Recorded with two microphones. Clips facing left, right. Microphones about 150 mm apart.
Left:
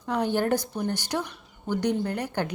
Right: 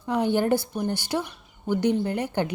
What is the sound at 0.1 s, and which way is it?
Speech, 15° right (ahead or behind).